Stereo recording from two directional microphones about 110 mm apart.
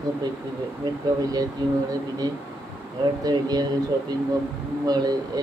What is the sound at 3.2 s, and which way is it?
Speech, 35° right (ahead or behind).